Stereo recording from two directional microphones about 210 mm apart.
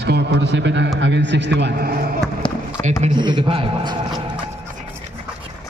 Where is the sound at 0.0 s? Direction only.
55° right (ahead or behind).